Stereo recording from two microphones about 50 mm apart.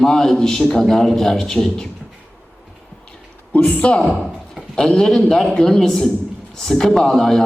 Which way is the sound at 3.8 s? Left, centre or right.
Left.